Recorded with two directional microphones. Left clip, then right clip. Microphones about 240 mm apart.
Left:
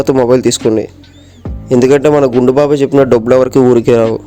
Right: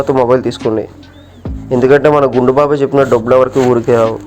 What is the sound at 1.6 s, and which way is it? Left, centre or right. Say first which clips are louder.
Speech: even; left.